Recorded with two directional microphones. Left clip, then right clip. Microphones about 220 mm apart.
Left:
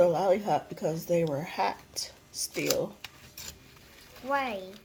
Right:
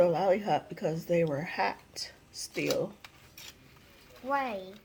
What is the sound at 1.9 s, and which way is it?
Whispering, 50° left (ahead or behind).